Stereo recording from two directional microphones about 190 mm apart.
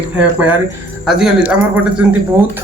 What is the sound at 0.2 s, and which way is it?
Speech, 5° right (ahead or behind).